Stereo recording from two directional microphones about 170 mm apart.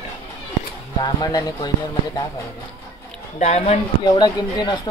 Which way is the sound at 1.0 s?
25° left (ahead or behind).